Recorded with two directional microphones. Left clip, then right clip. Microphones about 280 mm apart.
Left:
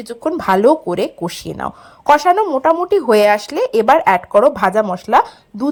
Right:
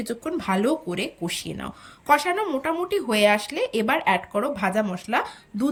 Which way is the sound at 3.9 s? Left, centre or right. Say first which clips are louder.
Left 12 dB; left.